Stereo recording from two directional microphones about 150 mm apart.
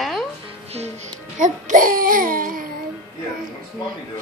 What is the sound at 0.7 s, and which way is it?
Music, 45° right (ahead or behind).